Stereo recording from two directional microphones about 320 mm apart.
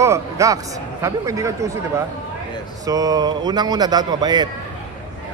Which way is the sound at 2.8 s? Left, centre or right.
Centre.